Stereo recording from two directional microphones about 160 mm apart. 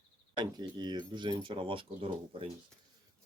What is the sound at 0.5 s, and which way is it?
Speech, 25° right (ahead or behind).